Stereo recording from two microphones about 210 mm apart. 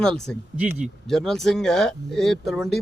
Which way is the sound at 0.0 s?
5° left (ahead or behind).